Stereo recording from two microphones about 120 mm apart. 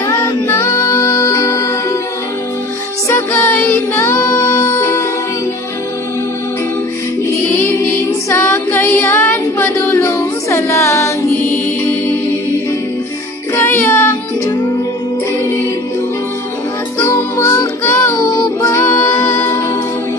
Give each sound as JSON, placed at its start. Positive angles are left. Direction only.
{"t": 0.0, "sound": "music", "side_deg": 20}
{"t": 3.1, "sound": "music", "side_deg": 25}
{"t": 7.4, "sound": "music", "side_deg": 20}
{"t": 13.6, "sound": "music", "side_deg": 20}
{"t": 17.0, "sound": "music", "side_deg": 25}